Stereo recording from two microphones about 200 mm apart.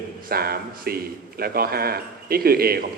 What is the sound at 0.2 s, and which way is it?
A man's voice, 50° right (ahead or behind).